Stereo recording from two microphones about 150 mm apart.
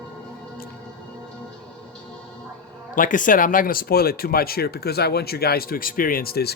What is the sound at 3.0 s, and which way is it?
Speech, 60° left (ahead or behind).